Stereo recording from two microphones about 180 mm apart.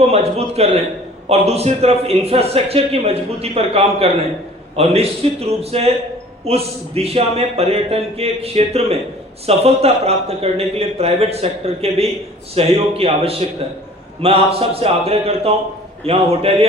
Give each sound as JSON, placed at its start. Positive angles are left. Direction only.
{"t": 0.1, "sound": "a man's voice", "side_deg": -35}